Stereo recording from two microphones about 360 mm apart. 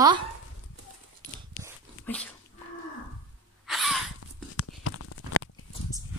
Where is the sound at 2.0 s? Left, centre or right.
Centre.